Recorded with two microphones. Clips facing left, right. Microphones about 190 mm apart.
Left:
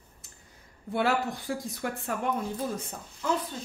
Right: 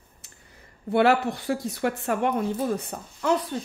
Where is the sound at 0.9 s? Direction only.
70° right (ahead or behind).